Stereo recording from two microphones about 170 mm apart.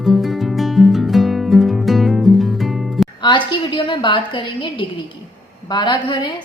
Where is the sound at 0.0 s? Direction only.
Centre (ahead or behind).